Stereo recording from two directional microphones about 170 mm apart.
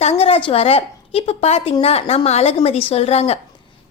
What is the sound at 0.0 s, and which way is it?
A woman's voice, 35° left (ahead or behind).